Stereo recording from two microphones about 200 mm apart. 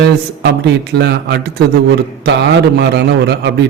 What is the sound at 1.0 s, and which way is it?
Speech, 55° right (ahead or behind).